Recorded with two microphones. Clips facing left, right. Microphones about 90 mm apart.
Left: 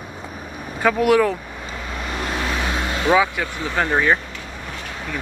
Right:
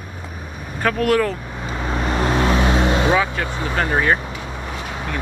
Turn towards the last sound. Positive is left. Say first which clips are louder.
# even
turn(degrees=-10)  # may be behind; listen again after turning